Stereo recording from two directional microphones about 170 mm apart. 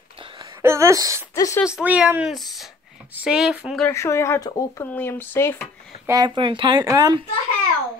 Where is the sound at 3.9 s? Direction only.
15° left (ahead or behind).